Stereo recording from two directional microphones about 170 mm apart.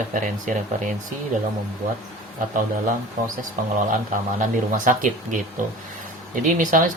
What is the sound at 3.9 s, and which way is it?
Speech, 50° right (ahead or behind).